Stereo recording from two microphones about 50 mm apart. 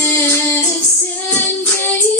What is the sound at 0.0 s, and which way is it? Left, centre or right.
Music, left.